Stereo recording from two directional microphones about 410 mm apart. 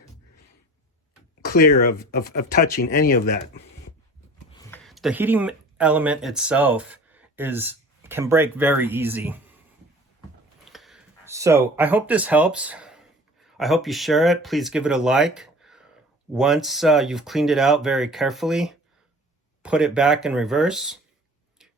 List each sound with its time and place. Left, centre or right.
1.5 s speech: left
4.5 s speech: centre
10.7 s speech: centre